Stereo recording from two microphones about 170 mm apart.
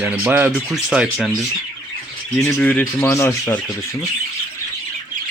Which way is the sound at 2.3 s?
10° left (ahead or behind).